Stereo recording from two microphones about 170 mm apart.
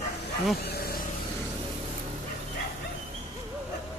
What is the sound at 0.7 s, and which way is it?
Vehicle, 65° left (ahead or behind).